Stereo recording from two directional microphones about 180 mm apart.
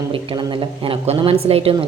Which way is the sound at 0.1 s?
30° right (ahead or behind).